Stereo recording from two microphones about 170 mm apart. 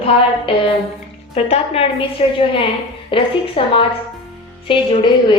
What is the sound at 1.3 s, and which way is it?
A woman's voice, 35° left (ahead or behind).